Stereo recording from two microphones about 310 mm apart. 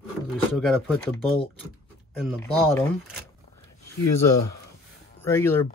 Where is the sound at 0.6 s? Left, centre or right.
Centre.